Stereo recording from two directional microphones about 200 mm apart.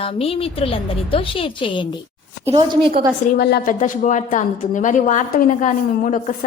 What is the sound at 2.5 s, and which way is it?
Speech, 25° right (ahead or behind).